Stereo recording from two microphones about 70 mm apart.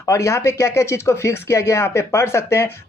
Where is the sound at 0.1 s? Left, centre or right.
Left.